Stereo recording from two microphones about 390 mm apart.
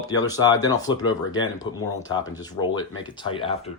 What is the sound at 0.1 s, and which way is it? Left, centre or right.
Speech, centre.